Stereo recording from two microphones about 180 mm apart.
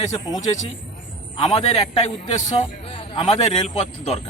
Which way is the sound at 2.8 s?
30° left (ahead or behind).